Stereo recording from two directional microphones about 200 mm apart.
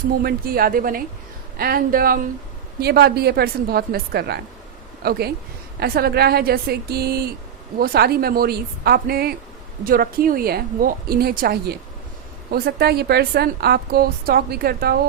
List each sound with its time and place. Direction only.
0.2 s a woman's voice: 50° right (ahead or behind)